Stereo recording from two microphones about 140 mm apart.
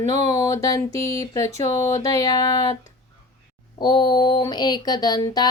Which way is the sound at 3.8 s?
30° left (ahead or behind).